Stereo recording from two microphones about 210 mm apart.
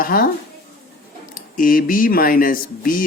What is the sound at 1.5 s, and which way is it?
Speech, 40° left (ahead or behind).